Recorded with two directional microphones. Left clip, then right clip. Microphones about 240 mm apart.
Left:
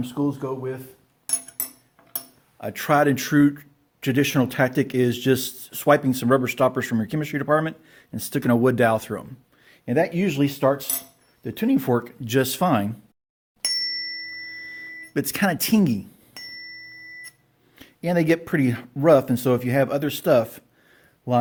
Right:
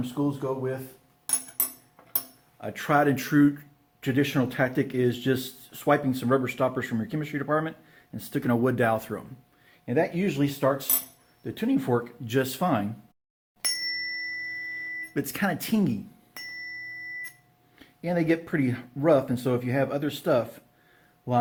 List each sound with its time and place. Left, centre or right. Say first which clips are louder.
0.0 s speech: left 3 dB; left
2.6 s speech: left 4 dB; left
13.6 s ding: left 4 dB; centre
14.6 s a sound: right 2 dB; left
15.1 s speech: left 7 dB; left
17.7 s speech: left 5 dB; left